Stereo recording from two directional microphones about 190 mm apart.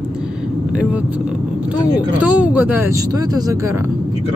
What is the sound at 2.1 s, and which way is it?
Speech, 10° right (ahead or behind).